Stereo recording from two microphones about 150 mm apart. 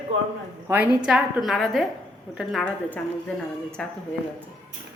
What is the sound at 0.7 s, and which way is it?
A woman's voice, 10° right (ahead or behind).